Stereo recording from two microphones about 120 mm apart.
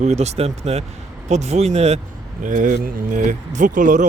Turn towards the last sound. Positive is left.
turn(degrees=-90)